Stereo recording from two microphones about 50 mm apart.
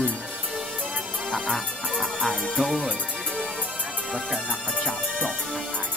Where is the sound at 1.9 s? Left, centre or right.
Centre.